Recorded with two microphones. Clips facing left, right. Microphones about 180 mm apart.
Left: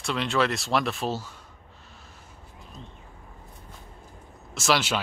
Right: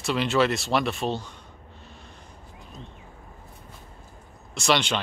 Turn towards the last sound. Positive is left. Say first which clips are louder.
# right 1 dB
turn(degrees=5)  # may be behind; listen again after turning